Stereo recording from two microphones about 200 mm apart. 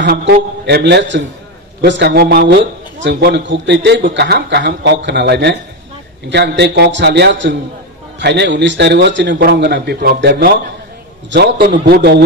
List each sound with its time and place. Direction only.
0.2 s a man's voice: 55° right (ahead or behind)